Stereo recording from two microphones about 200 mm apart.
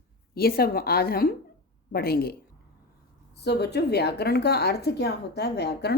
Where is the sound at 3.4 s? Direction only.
55° left (ahead or behind).